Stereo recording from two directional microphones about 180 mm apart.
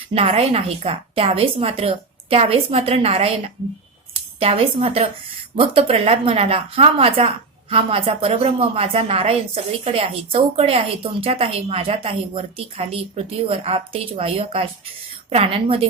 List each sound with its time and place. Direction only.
0.1 s speech: 35° right (ahead or behind)